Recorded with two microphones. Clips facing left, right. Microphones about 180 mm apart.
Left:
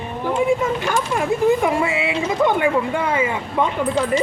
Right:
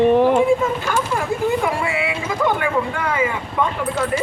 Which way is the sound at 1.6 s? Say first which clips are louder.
Left 2 dB; 20° left (ahead or behind).